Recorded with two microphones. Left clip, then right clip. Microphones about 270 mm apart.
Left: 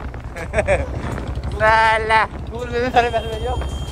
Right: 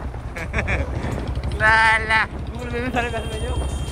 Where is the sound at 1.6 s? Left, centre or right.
Left.